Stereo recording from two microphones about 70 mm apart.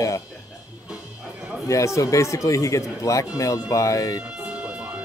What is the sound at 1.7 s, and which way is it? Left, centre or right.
Speech, left.